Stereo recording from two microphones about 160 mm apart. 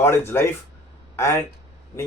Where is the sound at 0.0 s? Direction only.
15° left (ahead or behind).